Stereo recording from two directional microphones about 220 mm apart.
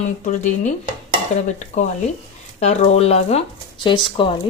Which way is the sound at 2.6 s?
30° left (ahead or behind).